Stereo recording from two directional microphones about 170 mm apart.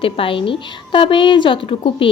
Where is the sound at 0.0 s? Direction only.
30° left (ahead or behind).